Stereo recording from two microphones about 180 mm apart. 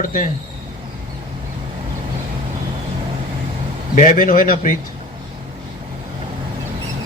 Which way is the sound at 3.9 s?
50° left (ahead or behind).